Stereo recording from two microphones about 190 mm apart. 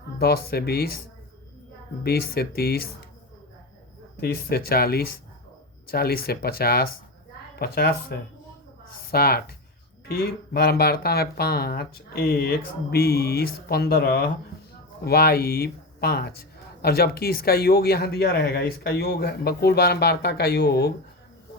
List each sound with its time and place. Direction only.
0.2 s speech: 55° left (ahead or behind)
2.0 s speech: 55° left (ahead or behind)
4.2 s speech: 55° left (ahead or behind)